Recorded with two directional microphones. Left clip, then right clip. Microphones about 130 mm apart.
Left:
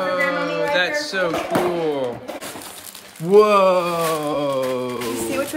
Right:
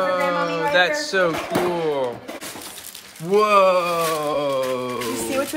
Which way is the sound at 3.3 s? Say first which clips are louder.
Left 2 dB; 20° left (ahead or behind).